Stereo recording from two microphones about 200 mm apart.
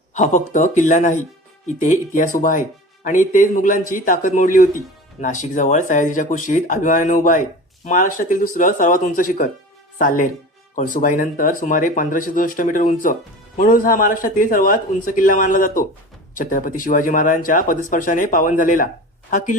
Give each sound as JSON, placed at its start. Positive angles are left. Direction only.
{"t": 0.1, "sound": "speech", "side_deg": 35}